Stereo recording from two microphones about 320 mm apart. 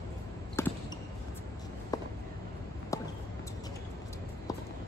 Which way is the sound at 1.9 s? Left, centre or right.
Centre.